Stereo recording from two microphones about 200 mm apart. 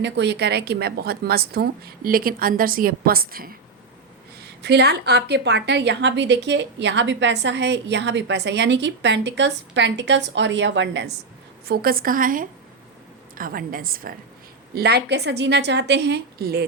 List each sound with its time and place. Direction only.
0.0 s a woman's voice: 60° right (ahead or behind)
4.6 s a woman's voice: 55° right (ahead or behind)
11.6 s a woman's voice: 50° right (ahead or behind)